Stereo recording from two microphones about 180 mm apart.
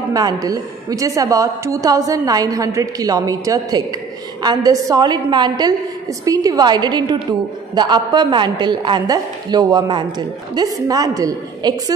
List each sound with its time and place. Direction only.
0.1 s a woman's voice: 20° right (ahead or behind)